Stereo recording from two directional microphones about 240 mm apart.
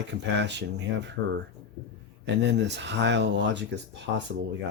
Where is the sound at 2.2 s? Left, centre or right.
Right.